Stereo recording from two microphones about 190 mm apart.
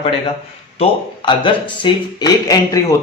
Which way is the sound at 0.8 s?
25° left (ahead or behind).